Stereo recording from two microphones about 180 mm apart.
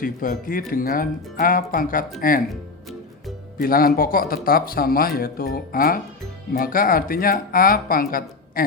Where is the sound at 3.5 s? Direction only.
55° left (ahead or behind).